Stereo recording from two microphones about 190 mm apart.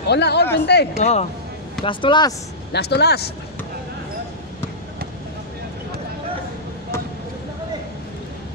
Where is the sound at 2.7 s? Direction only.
60° left (ahead or behind).